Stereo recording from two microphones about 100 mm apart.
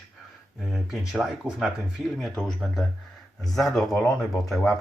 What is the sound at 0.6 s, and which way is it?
Speech, 5° right (ahead or behind).